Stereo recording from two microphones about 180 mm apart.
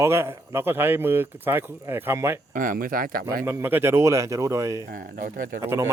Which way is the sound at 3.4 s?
15° right (ahead or behind).